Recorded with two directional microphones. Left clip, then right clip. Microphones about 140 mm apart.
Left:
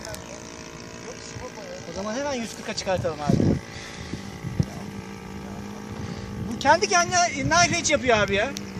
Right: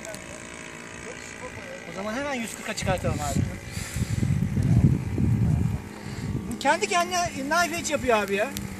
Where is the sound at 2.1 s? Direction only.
40° left (ahead or behind).